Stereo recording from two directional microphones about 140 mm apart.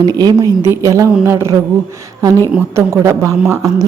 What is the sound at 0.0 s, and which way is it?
Speech, 30° right (ahead or behind).